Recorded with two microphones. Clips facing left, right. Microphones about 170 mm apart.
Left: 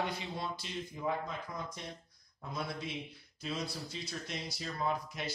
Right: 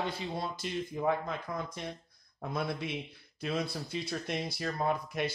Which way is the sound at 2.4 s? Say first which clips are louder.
Right 5 dB; 60° right (ahead or behind).